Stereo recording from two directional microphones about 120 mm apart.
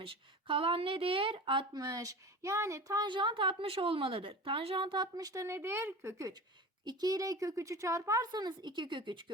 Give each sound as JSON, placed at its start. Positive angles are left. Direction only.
{"t": 0.0, "sound": "speech", "side_deg": -50}
{"t": 1.8, "sound": "a woman's voice", "side_deg": -30}